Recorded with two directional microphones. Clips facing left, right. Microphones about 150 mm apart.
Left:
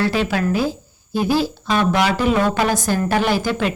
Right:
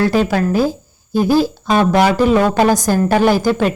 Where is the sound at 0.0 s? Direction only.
45° right (ahead or behind).